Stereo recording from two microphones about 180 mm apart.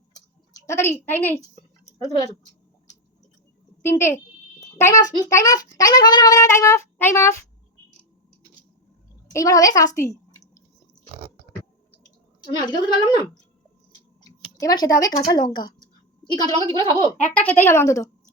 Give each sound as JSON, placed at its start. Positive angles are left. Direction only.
{"t": 0.7, "sound": "speech", "side_deg": 15}
{"t": 3.8, "sound": "a child's voice", "side_deg": 15}
{"t": 9.3, "sound": "a child's voice", "side_deg": 20}
{"t": 12.5, "sound": "a child's voice", "side_deg": 25}
{"t": 14.6, "sound": "a child's voice", "side_deg": 20}
{"t": 17.3, "sound": "speech", "side_deg": 10}